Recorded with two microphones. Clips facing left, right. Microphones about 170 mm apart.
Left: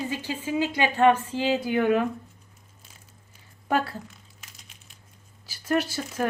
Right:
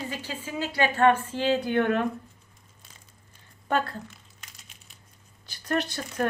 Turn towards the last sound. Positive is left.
turn(degrees=5)  # may be behind; listen again after turning